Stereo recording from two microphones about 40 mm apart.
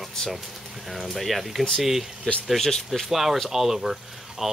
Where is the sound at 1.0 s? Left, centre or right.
Centre.